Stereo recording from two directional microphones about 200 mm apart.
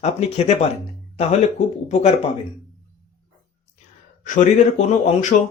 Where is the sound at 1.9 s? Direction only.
35° left (ahead or behind).